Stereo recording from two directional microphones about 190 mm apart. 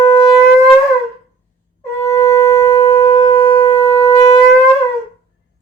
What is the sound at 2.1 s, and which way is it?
Shofar, 15° left (ahead or behind).